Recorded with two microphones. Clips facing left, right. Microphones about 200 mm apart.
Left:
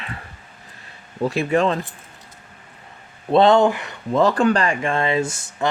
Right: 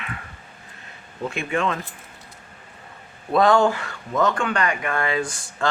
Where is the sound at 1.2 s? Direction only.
35° left (ahead or behind).